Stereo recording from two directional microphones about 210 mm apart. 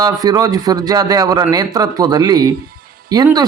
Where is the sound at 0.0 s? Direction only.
20° right (ahead or behind).